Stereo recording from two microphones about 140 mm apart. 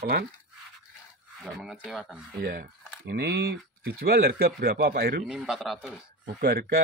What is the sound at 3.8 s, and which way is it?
Speech, 90° right.